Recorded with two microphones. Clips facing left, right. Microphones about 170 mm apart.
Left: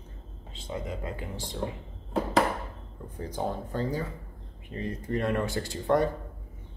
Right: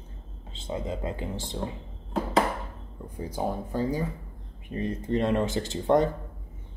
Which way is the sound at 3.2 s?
10° right (ahead or behind).